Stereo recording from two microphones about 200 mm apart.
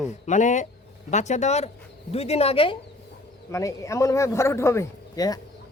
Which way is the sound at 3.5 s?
15° left (ahead or behind).